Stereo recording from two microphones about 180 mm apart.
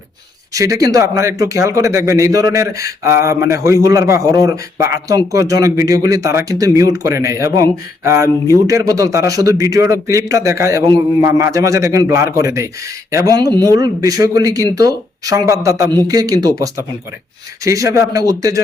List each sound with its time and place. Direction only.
0.5 s a man's voice: 20° right (ahead or behind)